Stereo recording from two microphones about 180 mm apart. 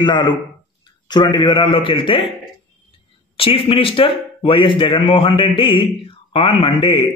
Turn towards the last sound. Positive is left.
turn(degrees=30)  # may be behind; listen again after turning